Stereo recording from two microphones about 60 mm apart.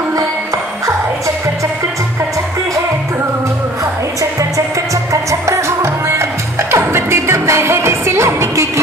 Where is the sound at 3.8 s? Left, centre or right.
Right.